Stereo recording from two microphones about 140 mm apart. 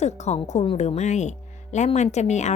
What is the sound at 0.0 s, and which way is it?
A woman's voice, 55° left (ahead or behind).